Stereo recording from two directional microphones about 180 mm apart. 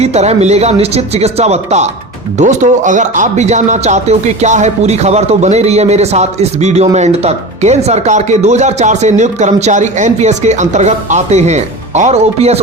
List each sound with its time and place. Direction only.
0.0 s speech: 35° right (ahead or behind)